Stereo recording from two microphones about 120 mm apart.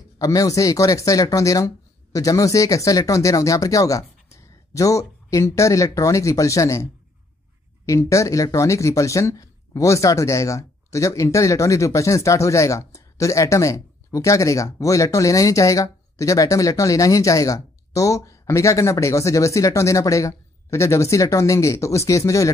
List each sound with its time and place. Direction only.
0.2 s speech: 30° left (ahead or behind)